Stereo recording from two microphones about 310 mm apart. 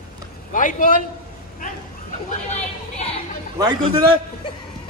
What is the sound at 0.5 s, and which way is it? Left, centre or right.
Speech, left.